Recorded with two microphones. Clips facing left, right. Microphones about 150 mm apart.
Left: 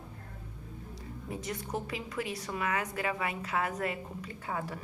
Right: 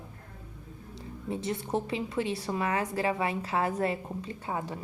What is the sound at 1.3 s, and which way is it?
A woman's voice, 25° right (ahead or behind).